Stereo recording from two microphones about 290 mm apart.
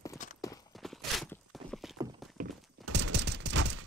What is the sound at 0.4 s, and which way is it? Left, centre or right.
Clip-clop, centre.